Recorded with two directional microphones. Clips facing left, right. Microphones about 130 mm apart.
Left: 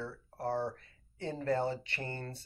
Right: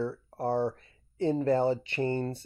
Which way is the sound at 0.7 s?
20° right (ahead or behind).